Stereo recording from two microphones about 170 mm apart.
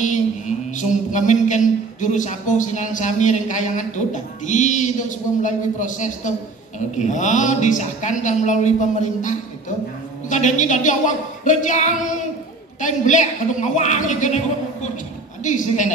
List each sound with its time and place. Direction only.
0.0 s mantra: 45° left (ahead or behind)
10.3 s mantra: 45° left (ahead or behind)